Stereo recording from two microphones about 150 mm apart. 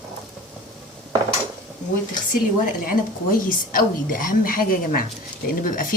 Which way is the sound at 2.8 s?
65° left (ahead or behind).